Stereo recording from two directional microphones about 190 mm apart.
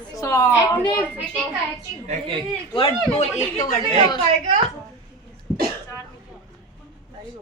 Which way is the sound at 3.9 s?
25° left (ahead or behind).